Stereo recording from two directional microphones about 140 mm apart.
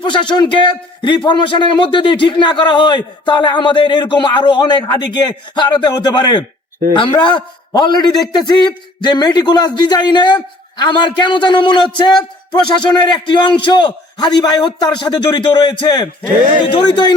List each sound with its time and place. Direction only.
0.0 s a man's voice: 35° left (ahead or behind)